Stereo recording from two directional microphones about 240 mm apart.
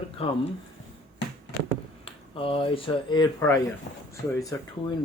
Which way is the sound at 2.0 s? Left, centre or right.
Left.